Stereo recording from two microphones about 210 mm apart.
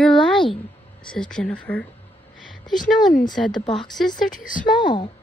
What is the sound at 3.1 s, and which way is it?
Speech, 40° left (ahead or behind).